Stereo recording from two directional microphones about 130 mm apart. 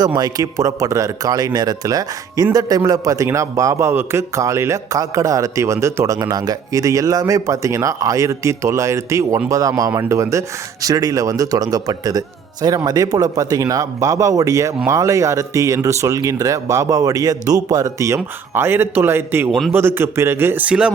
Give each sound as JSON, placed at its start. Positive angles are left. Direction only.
{"t": 0.2, "sound": "a man's voice", "side_deg": -25}
{"t": 19.5, "sound": "a man's voice", "side_deg": 5}
{"t": 19.7, "sound": "a man's voice", "side_deg": -20}